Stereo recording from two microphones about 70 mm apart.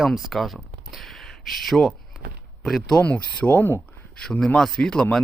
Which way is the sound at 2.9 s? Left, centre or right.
Centre.